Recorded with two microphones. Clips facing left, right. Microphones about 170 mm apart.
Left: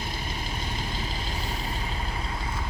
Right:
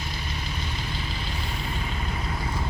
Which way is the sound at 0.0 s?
50° left (ahead or behind).